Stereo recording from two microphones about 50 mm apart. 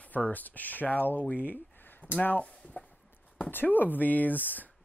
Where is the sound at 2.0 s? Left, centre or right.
Left.